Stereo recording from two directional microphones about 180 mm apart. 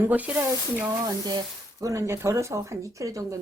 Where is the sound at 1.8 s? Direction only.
15° right (ahead or behind).